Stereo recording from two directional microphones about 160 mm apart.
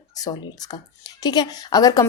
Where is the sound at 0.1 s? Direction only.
25° left (ahead or behind).